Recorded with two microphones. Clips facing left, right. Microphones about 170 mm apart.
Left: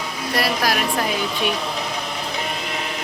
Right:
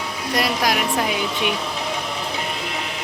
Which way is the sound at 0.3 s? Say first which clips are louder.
Even; 20° right (ahead or behind).